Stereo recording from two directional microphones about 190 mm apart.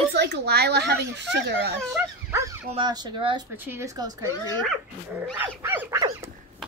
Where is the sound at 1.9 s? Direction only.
15° right (ahead or behind).